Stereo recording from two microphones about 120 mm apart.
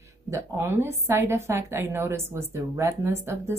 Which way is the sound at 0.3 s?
20° right (ahead or behind).